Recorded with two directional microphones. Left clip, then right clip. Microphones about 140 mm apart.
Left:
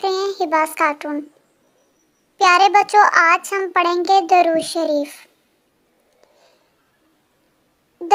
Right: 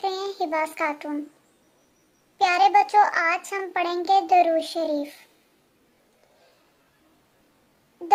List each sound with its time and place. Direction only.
0.0 s child singing: 35° left (ahead or behind)
2.4 s a child's voice: 35° left (ahead or behind)